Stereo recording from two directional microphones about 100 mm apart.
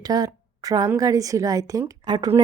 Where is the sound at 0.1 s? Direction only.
40° right (ahead or behind).